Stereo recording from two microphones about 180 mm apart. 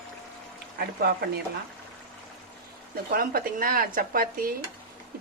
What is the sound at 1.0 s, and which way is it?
Speech, 60° right (ahead or behind).